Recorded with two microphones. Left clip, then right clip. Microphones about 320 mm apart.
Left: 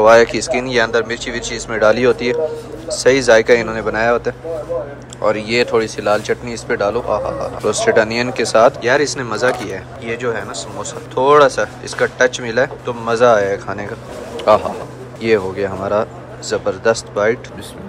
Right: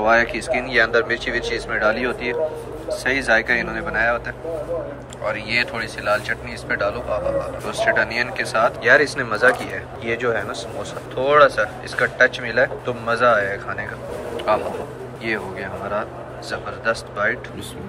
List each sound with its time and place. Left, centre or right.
0.2 s speech: centre
15.2 s speech: centre